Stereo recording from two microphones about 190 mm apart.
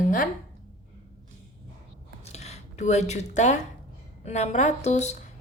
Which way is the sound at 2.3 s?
35° left (ahead or behind).